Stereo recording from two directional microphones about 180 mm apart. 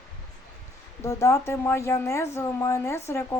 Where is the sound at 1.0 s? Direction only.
15° left (ahead or behind).